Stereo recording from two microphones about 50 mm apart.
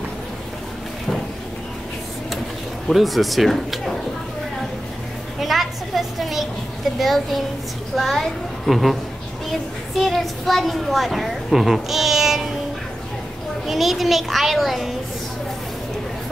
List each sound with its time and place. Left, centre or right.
2.9 s speech: centre
5.4 s a sound: centre
7.0 s a child's voice: centre
13.7 s a child's voice: centre